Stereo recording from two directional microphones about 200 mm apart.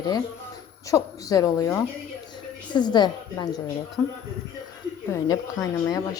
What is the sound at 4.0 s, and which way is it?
Speech, 10° left (ahead or behind).